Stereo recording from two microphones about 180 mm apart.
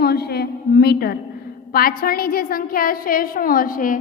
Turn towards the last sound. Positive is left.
turn(degrees=50)  # may be behind; listen again after turning